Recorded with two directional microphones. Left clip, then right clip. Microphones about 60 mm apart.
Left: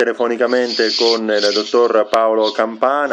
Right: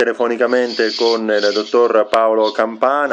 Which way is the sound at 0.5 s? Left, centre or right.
Left.